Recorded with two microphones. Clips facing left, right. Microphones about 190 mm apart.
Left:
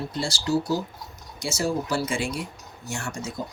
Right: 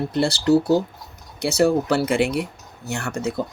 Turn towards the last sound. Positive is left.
turn(degrees=-60)  # may be behind; listen again after turning